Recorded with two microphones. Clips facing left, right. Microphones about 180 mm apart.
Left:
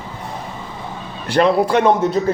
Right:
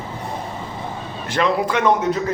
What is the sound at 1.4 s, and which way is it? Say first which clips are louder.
Speech: left 4 dB; 35° left (ahead or behind).